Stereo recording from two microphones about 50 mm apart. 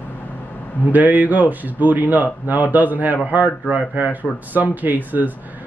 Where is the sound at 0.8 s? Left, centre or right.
Right.